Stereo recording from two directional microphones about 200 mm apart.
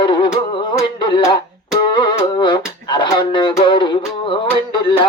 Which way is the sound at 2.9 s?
25° left (ahead or behind).